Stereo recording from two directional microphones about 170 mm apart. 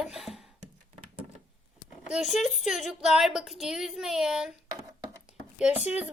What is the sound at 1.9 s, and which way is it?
Speech, 5° right (ahead or behind).